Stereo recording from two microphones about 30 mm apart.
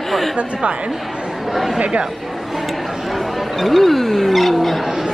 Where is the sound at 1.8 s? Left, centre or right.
Right.